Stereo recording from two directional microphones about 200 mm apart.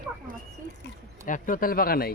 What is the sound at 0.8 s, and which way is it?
Speech, 45° left (ahead or behind).